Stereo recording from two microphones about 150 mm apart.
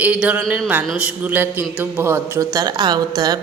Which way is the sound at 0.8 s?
5° right (ahead or behind).